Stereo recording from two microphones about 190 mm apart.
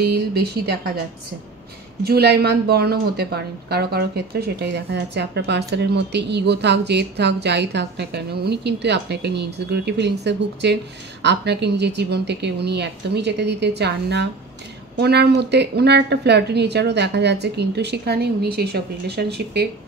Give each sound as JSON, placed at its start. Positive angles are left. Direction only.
{"t": 0.0, "sound": "a woman's voice", "side_deg": -60}
{"t": 2.0, "sound": "a woman's voice", "side_deg": -55}